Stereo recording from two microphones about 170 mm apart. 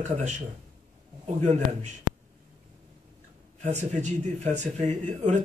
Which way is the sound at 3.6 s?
45° right (ahead or behind).